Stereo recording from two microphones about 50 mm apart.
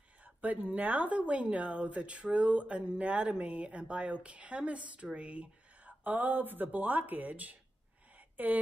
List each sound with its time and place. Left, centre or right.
0.2 s speech: right